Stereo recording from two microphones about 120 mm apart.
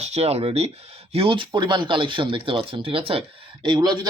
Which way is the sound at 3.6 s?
40° right (ahead or behind).